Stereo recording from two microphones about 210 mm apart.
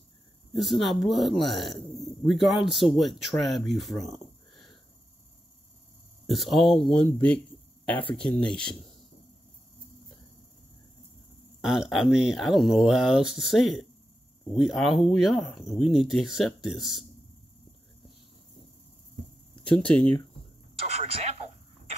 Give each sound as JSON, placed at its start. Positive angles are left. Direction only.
{"t": 0.5, "sound": "speech", "side_deg": 0}
{"t": 6.2, "sound": "speech", "side_deg": 0}
{"t": 11.6, "sound": "speech", "side_deg": 0}
{"t": 19.6, "sound": "speech", "side_deg": 5}
{"t": 21.0, "sound": "speech", "side_deg": -30}